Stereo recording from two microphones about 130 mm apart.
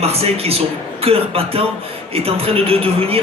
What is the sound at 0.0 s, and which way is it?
A man's voice, 50° right (ahead or behind).